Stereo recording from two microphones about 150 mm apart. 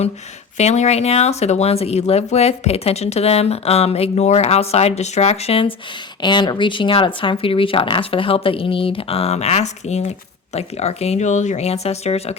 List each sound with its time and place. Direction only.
0.5 s speech: 50° left (ahead or behind)